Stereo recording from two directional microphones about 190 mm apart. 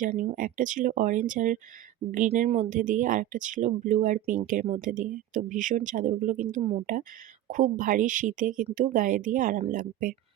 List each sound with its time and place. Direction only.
0.0 s speech: 40° right (ahead or behind)